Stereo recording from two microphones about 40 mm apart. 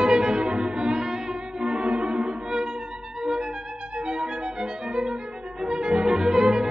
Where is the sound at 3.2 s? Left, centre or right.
Centre.